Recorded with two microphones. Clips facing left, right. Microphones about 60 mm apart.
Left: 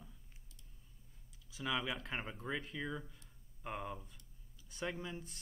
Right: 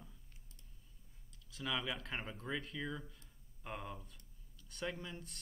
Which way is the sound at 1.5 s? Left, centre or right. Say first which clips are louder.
Left 2 dB; centre.